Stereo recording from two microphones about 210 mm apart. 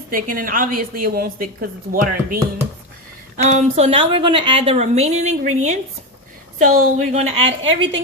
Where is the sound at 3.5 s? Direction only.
35° right (ahead or behind).